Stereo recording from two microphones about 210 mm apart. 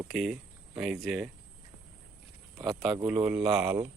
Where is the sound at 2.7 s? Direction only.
Centre (ahead or behind).